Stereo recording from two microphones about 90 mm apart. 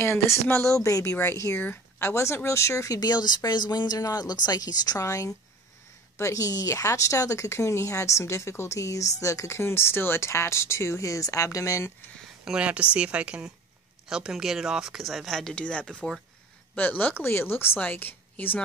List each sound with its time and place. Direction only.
0.0 s speech: 30° left (ahead or behind)
12.4 s a woman's voice: 10° right (ahead or behind); by 18.6 s 20° left (ahead or behind)